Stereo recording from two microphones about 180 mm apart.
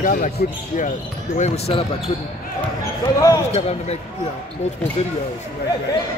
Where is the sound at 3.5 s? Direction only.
35° left (ahead or behind).